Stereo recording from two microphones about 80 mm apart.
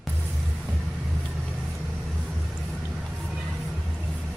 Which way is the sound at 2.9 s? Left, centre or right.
Centre.